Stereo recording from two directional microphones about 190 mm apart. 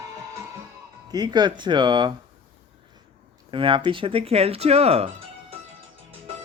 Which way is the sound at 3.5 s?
25° right (ahead or behind).